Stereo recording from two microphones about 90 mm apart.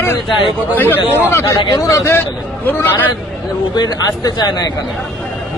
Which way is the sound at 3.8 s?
50° left (ahead or behind).